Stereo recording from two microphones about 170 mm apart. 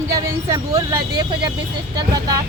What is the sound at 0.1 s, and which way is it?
Speech, 20° right (ahead or behind).